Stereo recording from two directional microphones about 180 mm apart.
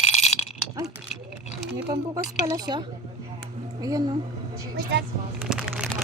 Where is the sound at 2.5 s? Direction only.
25° right (ahead or behind).